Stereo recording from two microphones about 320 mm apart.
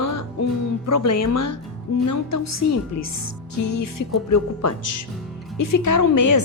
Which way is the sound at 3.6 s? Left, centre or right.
Left.